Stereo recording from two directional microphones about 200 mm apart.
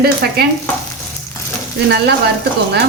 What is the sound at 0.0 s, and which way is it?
Speech, 55° right (ahead or behind).